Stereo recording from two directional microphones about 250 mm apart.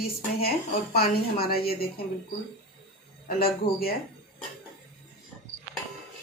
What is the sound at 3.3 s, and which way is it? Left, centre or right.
Speech, left.